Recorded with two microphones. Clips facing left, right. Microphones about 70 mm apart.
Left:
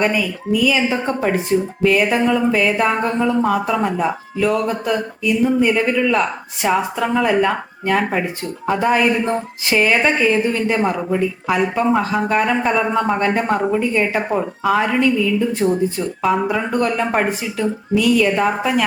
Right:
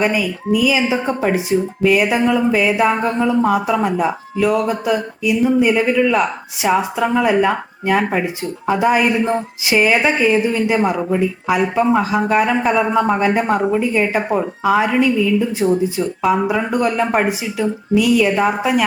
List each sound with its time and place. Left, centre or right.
0.0 s speech: centre